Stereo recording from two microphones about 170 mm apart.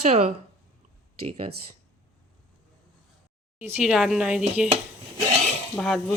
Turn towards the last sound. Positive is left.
turn(degrees=0)  # may be behind; listen again after turning